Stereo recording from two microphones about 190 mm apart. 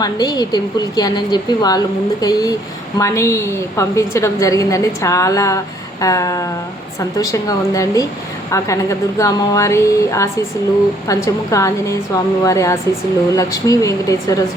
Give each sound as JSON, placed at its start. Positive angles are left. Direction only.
{"t": 0.0, "sound": "a woman's voice", "side_deg": 20}